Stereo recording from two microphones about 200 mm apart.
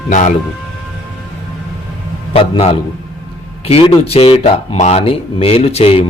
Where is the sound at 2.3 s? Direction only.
30° left (ahead or behind).